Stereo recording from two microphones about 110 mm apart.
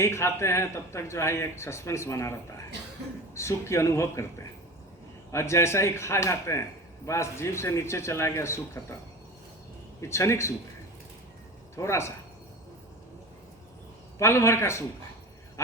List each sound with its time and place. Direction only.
0.0 s speech: 25° left (ahead or behind)
3.3 s speech: 25° left (ahead or behind)
5.3 s speech: 25° left (ahead or behind)
10.0 s speech: 25° left (ahead or behind)
11.8 s speech: 25° left (ahead or behind)
14.2 s speech: 25° left (ahead or behind)